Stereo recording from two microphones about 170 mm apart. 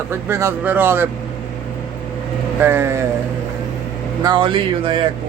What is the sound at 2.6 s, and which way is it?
Speech, 15° right (ahead or behind).